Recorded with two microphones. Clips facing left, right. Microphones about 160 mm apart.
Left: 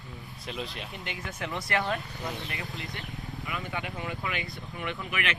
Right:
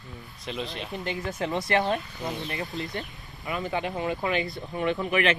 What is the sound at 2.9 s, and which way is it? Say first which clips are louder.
Speech: right 3 dB; 40° right (ahead or behind).